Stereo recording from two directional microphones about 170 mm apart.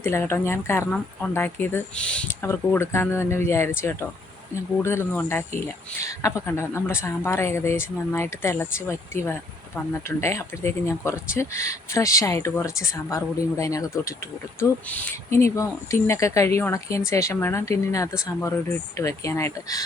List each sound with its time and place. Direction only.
0.0 s speech: 15° left (ahead or behind)